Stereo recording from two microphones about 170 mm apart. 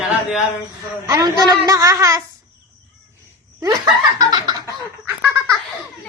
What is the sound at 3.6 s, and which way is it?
Speech, 20° right (ahead or behind).